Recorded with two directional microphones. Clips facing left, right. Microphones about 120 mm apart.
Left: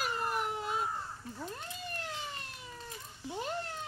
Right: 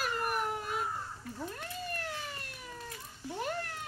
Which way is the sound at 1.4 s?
20° left (ahead or behind).